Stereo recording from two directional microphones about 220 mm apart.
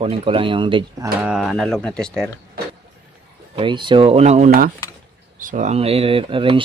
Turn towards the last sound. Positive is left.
turn(degrees=-25)  # may be behind; listen again after turning